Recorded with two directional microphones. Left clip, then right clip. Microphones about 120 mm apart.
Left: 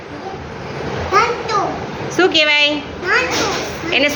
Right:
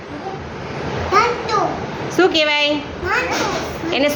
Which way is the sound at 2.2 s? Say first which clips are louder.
Left 2 dB; 25° right (ahead or behind).